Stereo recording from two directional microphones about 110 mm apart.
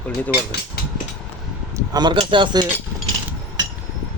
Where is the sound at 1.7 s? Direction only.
40° right (ahead or behind).